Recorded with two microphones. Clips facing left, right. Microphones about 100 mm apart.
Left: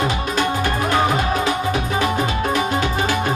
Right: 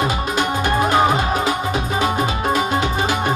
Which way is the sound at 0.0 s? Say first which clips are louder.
Even; 20° right (ahead or behind).